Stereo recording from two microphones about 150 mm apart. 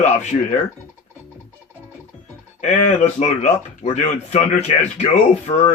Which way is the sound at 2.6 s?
50° left (ahead or behind).